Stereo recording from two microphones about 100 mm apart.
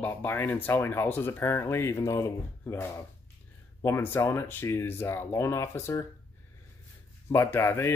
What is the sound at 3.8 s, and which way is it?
Speech, 25° left (ahead or behind).